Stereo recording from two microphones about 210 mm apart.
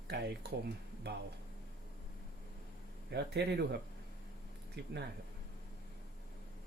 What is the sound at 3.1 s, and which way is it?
Speech, 50° right (ahead or behind).